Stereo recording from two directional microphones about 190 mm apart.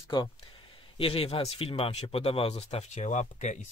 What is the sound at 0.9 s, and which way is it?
Speech, 30° left (ahead or behind).